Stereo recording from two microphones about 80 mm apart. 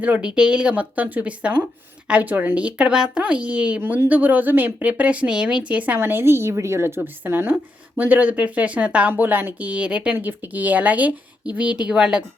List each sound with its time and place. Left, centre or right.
0.0 s a woman's voice: centre